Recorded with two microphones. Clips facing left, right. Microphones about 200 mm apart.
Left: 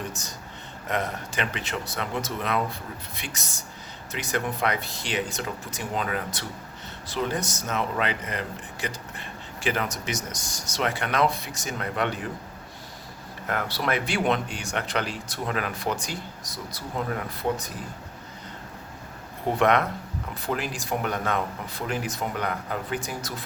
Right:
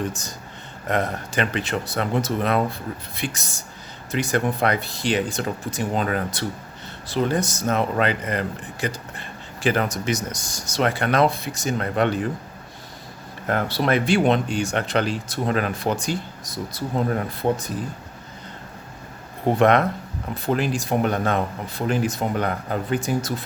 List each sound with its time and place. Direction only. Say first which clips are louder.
0.9 s speech: right 5 dB; 35° right (ahead or behind)
9.6 s speech: right 6 dB; 35° right (ahead or behind)
13.5 s speech: right 6 dB; 30° right (ahead or behind)
19.5 s speech: right 4 dB; 30° right (ahead or behind)